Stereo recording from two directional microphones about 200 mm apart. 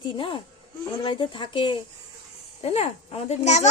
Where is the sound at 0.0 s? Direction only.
25° left (ahead or behind).